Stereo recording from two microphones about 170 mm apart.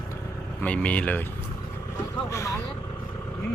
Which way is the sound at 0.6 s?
5° left (ahead or behind).